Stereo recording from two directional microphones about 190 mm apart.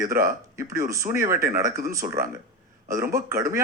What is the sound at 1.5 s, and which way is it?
Speech, 45° right (ahead or behind).